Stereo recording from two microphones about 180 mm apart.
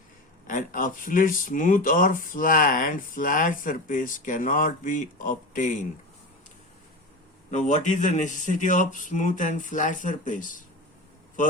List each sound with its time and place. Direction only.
0.4 s speech: 50° left (ahead or behind)
7.5 s speech: 40° left (ahead or behind)